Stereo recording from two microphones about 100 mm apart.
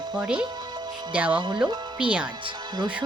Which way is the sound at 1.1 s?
15° right (ahead or behind).